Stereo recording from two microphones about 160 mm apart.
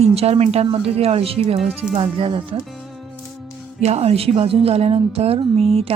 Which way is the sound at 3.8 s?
40° right (ahead or behind).